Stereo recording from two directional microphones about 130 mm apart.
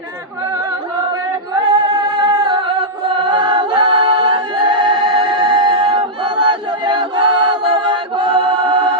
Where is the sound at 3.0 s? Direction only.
40° right (ahead or behind).